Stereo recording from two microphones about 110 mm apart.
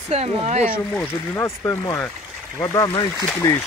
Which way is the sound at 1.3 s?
25° left (ahead or behind).